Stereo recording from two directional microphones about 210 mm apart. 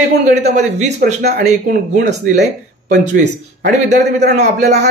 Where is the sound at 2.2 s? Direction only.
35° right (ahead or behind).